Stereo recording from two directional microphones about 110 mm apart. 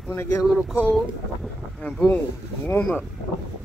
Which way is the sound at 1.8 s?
10° left (ahead or behind).